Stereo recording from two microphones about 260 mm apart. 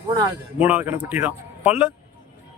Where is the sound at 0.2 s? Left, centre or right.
Centre.